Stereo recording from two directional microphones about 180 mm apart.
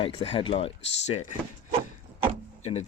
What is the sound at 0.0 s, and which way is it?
Speech, 30° left (ahead or behind).